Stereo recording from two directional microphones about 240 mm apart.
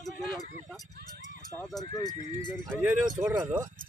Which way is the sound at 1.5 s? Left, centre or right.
Centre.